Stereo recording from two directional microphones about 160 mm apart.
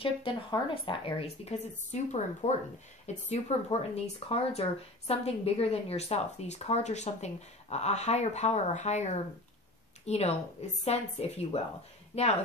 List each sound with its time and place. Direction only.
0.0 s a woman's voice: 35° left (ahead or behind)